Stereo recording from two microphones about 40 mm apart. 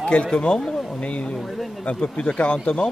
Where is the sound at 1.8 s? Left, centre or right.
Left.